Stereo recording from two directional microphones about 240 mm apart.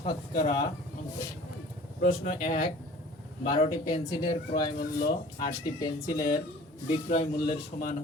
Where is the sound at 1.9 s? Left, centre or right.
Left.